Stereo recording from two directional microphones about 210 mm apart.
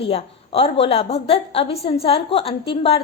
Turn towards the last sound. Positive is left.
turn(degrees=25)  # may be behind; listen again after turning